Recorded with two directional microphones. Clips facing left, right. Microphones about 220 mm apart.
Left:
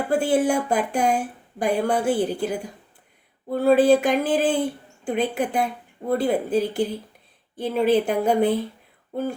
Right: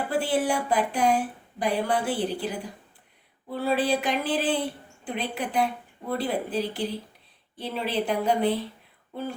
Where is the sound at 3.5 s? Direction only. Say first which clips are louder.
Left 9 dB; 45° left (ahead or behind).